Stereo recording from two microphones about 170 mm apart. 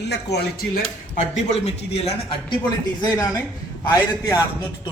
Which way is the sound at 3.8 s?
15° left (ahead or behind).